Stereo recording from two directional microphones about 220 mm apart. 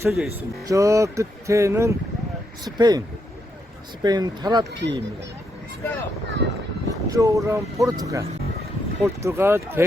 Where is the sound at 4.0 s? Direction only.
20° right (ahead or behind).